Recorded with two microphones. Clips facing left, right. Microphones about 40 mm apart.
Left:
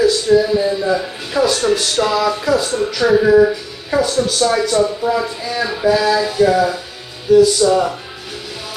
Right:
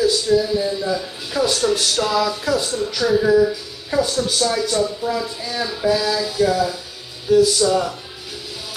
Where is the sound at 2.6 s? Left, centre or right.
Left.